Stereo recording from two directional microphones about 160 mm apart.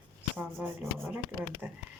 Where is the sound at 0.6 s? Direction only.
15° right (ahead or behind).